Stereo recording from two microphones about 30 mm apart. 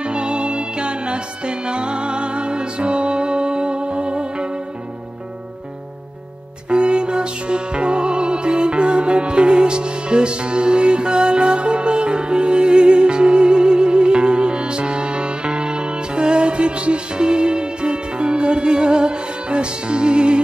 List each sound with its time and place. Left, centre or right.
0.0 s music: right
6.7 s music: right